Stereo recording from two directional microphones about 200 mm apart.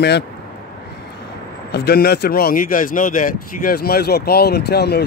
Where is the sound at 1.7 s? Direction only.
55° left (ahead or behind).